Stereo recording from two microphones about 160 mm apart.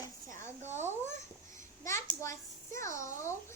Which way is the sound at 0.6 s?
15° right (ahead or behind).